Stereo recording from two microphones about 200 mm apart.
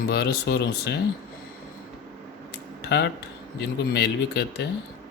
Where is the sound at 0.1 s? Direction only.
55° left (ahead or behind).